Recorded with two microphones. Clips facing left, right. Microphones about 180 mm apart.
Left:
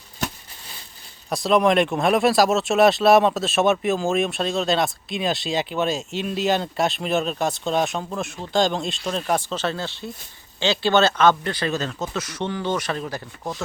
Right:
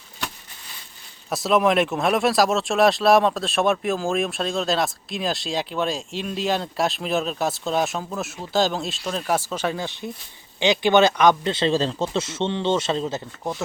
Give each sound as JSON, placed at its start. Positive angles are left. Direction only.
{"t": 1.3, "sound": "speech", "side_deg": 0}